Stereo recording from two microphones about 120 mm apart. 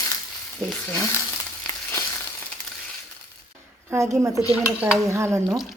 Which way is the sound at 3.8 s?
25° right (ahead or behind).